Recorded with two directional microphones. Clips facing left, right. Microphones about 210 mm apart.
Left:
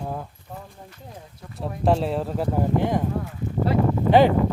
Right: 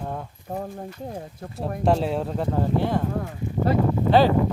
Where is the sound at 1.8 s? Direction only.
Centre (ahead or behind).